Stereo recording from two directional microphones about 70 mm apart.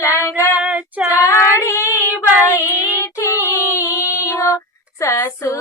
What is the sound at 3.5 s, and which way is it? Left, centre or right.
Child singing, left.